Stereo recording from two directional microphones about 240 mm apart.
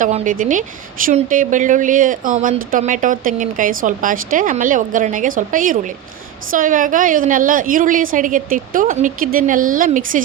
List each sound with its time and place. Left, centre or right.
0.0 s a woman's voice: right